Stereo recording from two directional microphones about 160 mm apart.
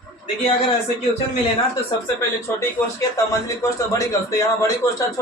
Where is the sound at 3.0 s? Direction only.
20° left (ahead or behind).